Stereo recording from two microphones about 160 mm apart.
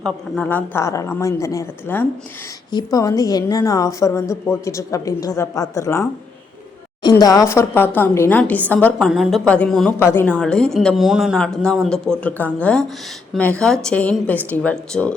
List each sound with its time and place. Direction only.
0.0 s a woman's voice: 5° left (ahead or behind)
10.0 s a woman's voice: 15° left (ahead or behind)